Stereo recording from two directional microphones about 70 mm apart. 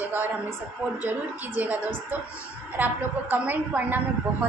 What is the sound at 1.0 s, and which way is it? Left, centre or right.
Speech, right.